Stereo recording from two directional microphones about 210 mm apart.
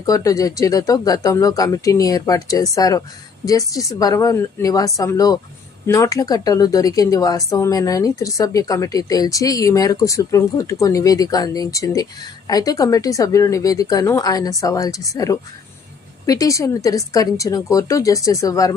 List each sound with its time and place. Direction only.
0.0 s speech: 15° left (ahead or behind)